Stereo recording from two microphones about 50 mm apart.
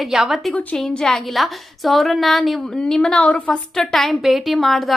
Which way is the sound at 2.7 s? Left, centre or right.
Centre.